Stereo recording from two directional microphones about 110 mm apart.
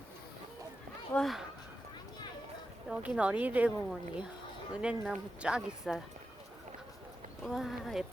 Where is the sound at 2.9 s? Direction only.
10° right (ahead or behind).